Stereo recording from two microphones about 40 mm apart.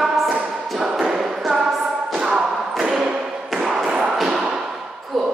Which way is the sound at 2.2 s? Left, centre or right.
Right.